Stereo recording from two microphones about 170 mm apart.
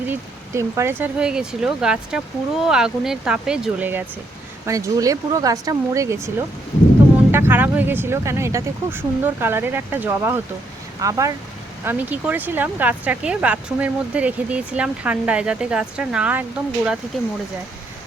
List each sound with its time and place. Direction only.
0.1 s speech: 15° right (ahead or behind)
7.3 s speech: 15° right (ahead or behind)